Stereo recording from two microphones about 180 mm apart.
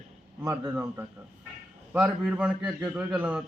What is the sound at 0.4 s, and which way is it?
A man's voice, 15° right (ahead or behind).